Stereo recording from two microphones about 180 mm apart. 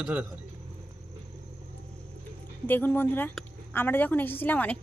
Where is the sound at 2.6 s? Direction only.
10° left (ahead or behind).